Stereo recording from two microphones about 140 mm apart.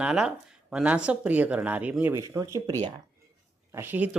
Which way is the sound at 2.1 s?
25° right (ahead or behind).